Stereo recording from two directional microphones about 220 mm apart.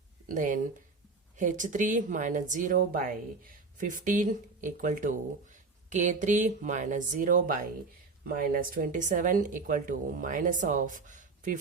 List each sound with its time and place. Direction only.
0.3 s speech: 35° right (ahead or behind)